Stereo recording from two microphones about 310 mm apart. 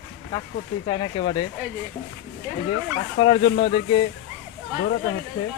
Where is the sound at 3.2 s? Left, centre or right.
Centre.